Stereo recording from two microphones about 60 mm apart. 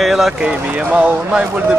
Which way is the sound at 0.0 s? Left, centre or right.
Centre.